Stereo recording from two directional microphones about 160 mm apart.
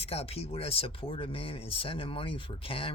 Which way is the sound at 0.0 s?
40° left (ahead or behind).